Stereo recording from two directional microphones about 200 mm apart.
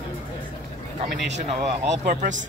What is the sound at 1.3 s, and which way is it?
Speech, 35° right (ahead or behind).